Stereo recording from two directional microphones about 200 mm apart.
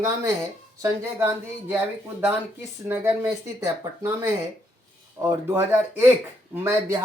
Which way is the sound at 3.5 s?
15° right (ahead or behind).